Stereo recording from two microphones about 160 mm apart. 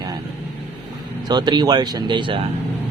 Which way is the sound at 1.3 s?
25° right (ahead or behind).